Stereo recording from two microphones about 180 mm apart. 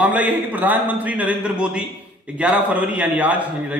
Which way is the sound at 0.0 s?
10° right (ahead or behind).